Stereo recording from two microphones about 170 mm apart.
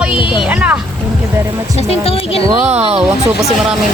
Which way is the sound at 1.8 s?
35° left (ahead or behind).